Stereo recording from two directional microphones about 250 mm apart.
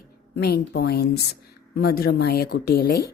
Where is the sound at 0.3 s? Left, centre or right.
Left.